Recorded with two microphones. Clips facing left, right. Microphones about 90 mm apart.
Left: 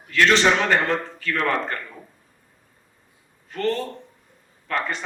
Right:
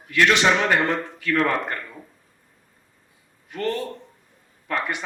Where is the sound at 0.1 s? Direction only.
15° right (ahead or behind).